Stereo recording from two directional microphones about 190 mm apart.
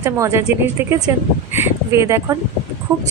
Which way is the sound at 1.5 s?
15° right (ahead or behind).